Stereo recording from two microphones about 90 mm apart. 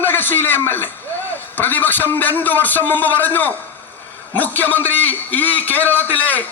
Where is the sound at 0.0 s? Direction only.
20° left (ahead or behind).